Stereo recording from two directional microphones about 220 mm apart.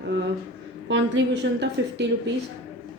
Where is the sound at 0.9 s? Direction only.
55° right (ahead or behind).